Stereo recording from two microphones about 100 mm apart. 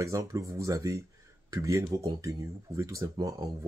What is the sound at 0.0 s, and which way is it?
Speech, 35° right (ahead or behind).